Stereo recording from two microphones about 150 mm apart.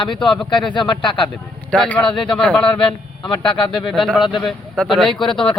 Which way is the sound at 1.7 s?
10° left (ahead or behind).